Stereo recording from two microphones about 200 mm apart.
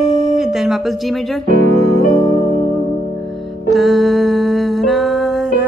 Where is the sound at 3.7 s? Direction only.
Centre (ahead or behind).